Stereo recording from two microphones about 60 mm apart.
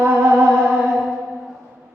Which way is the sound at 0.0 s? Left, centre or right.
Right.